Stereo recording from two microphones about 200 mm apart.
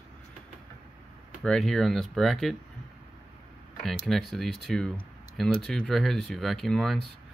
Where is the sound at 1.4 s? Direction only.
5° left (ahead or behind).